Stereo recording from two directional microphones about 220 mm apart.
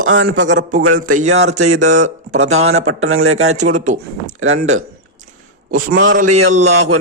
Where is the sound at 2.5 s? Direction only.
70° right (ahead or behind).